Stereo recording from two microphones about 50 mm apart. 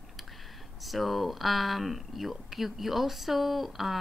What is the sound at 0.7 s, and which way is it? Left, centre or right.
A woman's voice, centre.